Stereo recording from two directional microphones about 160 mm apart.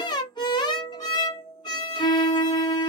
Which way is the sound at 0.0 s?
25° left (ahead or behind).